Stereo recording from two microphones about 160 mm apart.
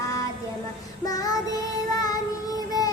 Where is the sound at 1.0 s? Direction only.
20° left (ahead or behind).